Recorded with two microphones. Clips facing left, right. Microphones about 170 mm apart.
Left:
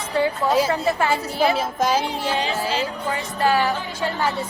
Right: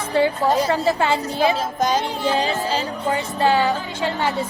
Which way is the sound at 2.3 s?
40° right (ahead or behind).